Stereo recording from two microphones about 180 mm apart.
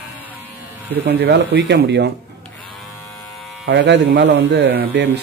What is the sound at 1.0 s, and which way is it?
Speech, 65° right (ahead or behind).